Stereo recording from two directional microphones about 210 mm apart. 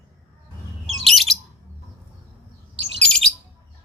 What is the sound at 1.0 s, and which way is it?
Bird, centre (ahead or behind).